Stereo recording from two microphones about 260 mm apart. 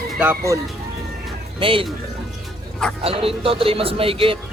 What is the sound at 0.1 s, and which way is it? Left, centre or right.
Speech, centre.